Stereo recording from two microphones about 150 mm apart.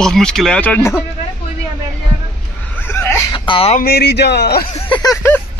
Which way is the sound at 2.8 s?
15° left (ahead or behind).